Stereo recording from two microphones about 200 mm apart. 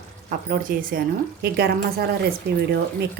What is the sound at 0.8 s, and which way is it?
Speech, 45° right (ahead or behind).